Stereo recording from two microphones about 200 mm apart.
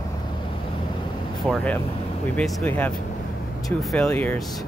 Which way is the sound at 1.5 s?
Centre (ahead or behind).